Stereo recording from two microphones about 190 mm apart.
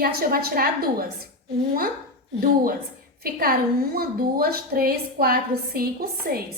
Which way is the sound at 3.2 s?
50° right (ahead or behind).